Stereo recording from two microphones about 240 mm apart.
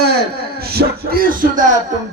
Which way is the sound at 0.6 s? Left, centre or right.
Right.